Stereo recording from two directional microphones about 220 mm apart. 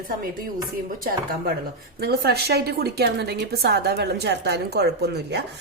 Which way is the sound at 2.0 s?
45° right (ahead or behind).